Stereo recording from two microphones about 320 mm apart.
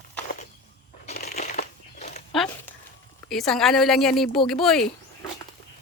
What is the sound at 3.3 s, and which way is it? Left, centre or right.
Speech, centre.